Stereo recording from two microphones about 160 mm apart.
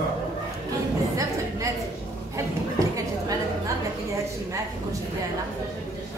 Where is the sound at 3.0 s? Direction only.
20° right (ahead or behind).